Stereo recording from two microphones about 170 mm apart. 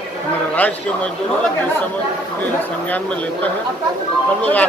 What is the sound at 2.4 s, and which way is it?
Speech, 10° left (ahead or behind).